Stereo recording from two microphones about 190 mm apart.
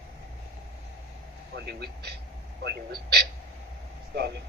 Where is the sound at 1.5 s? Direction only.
55° right (ahead or behind).